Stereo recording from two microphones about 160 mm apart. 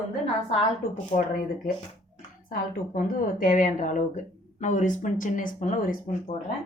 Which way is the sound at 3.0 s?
55° left (ahead or behind).